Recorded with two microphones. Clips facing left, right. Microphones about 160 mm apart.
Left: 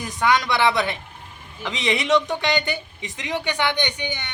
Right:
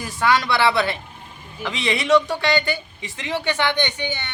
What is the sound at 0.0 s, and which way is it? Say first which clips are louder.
Speech: right 1 dB; 20° left (ahead or behind).